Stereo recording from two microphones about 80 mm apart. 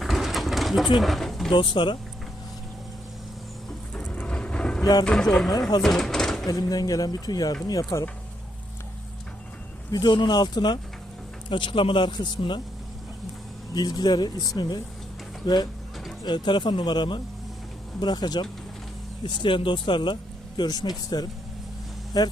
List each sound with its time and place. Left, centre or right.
0.0 s bird: centre
0.9 s speech: centre
1.5 s speech: left
4.1 s a sound: centre
5.0 s speech: centre
5.8 s door: centre
6.4 s speech: left
9.9 s speech: left
11.4 s speech: left
13.7 s speech: left
16.2 s speech: left
18.0 s speech: left
19.4 s speech: left
20.6 s speech: left